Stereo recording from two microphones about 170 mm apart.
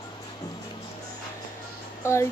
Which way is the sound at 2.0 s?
15° left (ahead or behind).